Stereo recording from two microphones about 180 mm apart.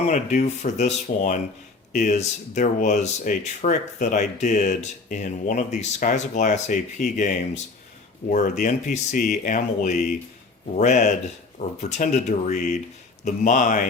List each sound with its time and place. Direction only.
0.1 s speech: 40° left (ahead or behind)